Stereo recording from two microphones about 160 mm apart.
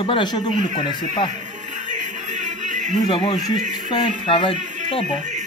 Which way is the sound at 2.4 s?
50° right (ahead or behind).